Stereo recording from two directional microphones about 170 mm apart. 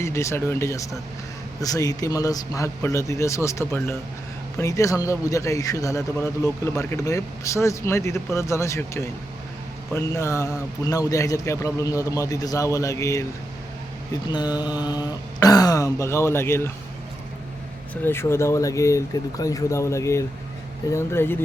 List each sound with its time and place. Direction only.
0.0 s a man's voice: 15° left (ahead or behind)
18.0 s a man's voice: 15° left (ahead or behind)